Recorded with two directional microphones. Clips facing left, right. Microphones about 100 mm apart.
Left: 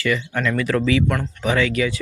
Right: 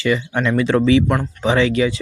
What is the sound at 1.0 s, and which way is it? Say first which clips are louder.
Speech: right 3 dB; 10° right (ahead or behind).